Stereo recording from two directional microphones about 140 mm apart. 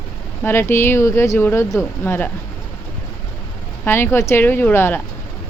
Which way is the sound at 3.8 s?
15° left (ahead or behind).